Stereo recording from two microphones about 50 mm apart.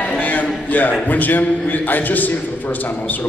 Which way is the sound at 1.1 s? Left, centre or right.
Left.